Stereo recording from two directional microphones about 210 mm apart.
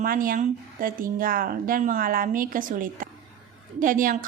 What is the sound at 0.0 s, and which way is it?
A woman's voice, 40° right (ahead or behind).